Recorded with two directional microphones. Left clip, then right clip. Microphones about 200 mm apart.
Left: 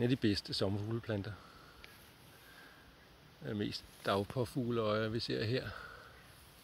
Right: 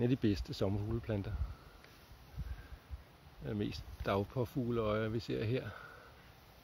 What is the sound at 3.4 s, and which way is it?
Speech, 5° right (ahead or behind).